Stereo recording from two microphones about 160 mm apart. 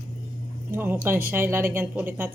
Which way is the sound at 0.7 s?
15° right (ahead or behind).